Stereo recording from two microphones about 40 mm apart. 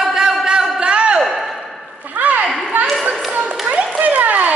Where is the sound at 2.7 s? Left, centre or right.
Right.